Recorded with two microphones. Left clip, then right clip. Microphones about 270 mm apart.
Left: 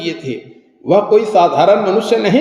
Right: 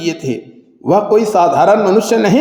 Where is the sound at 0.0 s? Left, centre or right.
Right.